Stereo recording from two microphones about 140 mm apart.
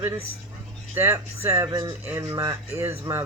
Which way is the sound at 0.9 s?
15° right (ahead or behind).